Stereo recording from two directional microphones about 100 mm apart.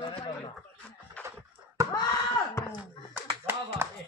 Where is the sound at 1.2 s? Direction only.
15° left (ahead or behind).